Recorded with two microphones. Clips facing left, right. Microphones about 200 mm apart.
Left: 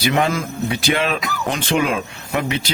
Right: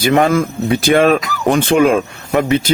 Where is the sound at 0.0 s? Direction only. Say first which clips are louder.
Right 7 dB; 50° right (ahead or behind).